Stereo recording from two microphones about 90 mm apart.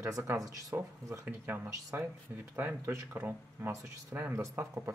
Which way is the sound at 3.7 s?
35° right (ahead or behind).